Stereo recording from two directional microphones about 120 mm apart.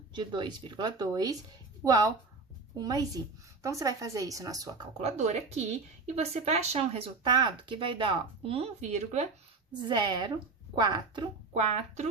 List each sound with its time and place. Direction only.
0.1 s speech: 40° right (ahead or behind)
4.9 s speech: 65° right (ahead or behind)
7.3 s speech: 40° right (ahead or behind)
8.8 s speech: 70° right (ahead or behind)
9.9 s speech: 40° right (ahead or behind)